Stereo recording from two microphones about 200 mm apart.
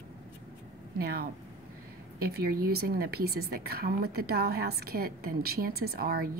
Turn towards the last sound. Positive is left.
turn(degrees=-50)  # may be behind; listen again after turning